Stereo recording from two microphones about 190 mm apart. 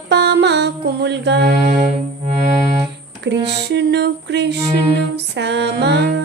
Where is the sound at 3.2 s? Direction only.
65° right (ahead or behind).